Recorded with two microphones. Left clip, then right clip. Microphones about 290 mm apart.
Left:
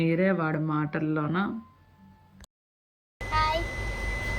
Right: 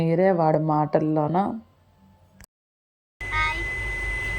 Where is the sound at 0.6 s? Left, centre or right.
Right.